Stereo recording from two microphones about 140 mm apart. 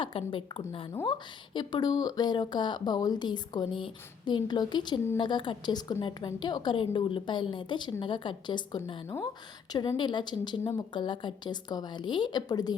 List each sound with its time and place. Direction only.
0.0 s speech: 40° left (ahead or behind)